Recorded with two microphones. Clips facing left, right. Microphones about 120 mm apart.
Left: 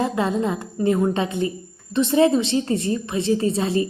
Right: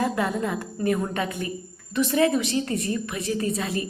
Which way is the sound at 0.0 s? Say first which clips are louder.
Left 3 dB; 25° left (ahead or behind).